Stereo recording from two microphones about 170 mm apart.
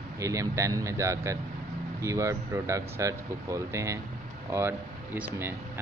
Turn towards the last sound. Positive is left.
turn(degrees=-15)  # may be behind; listen again after turning